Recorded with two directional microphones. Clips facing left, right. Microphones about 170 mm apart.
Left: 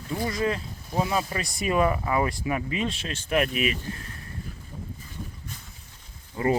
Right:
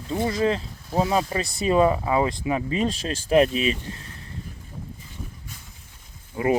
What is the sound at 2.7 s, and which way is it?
Speech, 40° right (ahead or behind).